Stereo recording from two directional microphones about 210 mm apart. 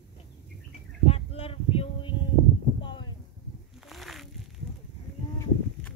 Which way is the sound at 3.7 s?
Centre (ahead or behind).